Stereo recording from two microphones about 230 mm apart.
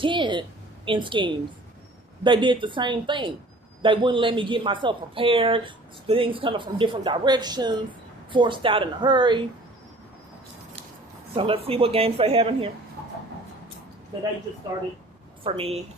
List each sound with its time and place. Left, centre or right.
0.0 s a sound: right
0.9 s speech: right
11.3 s speech: right
15.4 s speech: right